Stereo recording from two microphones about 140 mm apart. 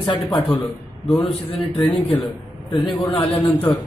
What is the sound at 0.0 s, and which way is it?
Speech, 35° left (ahead or behind).